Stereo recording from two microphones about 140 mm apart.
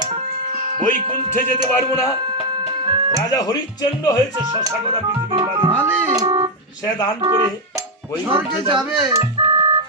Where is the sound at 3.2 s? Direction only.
25° left (ahead or behind).